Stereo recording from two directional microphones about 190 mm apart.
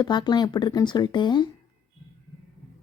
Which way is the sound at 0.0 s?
20° left (ahead or behind).